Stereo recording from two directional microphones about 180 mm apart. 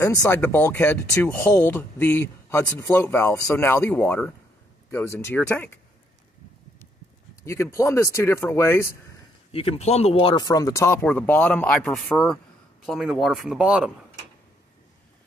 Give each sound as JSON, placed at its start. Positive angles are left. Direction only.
{"t": 0.0, "sound": "speech", "side_deg": 15}
{"t": 7.4, "sound": "speech", "side_deg": 15}
{"t": 9.5, "sound": "speech", "side_deg": 30}